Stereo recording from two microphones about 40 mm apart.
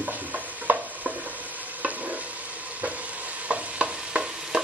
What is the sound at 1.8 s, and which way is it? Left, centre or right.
Stir, right.